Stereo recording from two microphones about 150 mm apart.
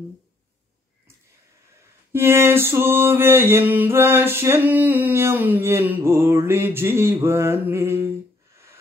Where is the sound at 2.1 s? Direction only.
15° right (ahead or behind).